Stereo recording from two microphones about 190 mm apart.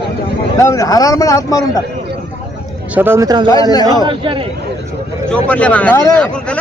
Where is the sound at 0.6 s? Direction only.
15° left (ahead or behind).